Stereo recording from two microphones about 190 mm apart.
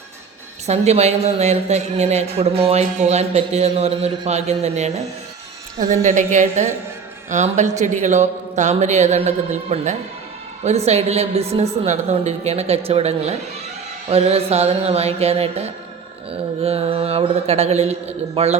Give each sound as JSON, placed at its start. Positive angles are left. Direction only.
{"t": 0.7, "sound": "a man's voice", "side_deg": -35}